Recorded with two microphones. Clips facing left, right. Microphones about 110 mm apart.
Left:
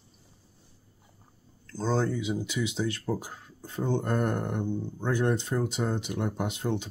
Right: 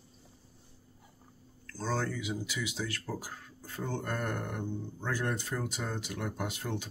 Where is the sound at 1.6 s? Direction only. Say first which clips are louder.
Left 6 dB; 20° left (ahead or behind).